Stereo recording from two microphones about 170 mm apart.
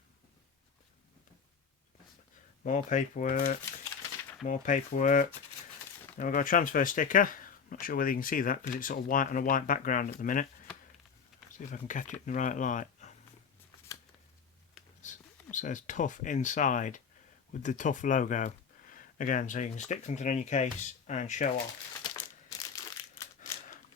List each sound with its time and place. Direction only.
2.6 s speech: 50° left (ahead or behind)
11.5 s speech: 50° left (ahead or behind)
15.0 s a sound: 45° left (ahead or behind)
15.5 s speech: 50° left (ahead or behind)
22.1 s crumpling: 15° left (ahead or behind)